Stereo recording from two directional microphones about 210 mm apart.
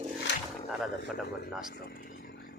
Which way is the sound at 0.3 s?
55° left (ahead or behind).